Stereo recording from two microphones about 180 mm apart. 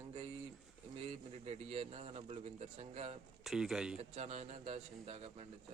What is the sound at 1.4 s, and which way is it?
A man's voice, 35° right (ahead or behind).